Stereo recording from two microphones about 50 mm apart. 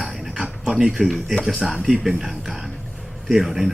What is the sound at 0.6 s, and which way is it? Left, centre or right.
Speech, centre.